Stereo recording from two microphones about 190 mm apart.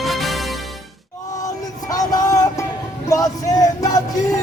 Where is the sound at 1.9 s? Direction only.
20° left (ahead or behind).